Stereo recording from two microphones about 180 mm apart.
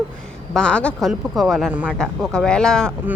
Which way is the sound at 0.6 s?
5° left (ahead or behind).